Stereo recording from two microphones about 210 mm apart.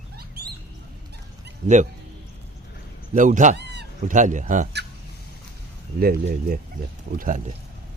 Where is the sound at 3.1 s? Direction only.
35° right (ahead or behind).